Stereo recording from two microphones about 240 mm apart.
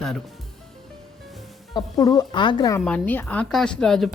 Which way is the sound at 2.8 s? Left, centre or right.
Centre.